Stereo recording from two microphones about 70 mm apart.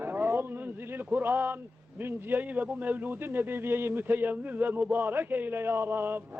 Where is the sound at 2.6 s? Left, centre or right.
Right.